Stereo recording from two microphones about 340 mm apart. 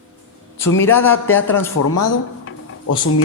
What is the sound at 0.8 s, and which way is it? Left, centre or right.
Speech, centre.